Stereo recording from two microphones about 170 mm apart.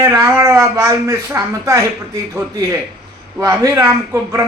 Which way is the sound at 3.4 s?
20° right (ahead or behind).